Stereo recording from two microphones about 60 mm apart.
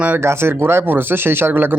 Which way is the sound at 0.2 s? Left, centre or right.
Right.